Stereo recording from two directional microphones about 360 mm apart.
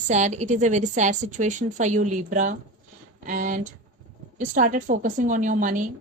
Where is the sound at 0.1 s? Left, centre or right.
Centre.